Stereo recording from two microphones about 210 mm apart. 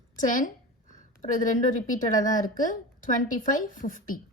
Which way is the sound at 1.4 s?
40° left (ahead or behind).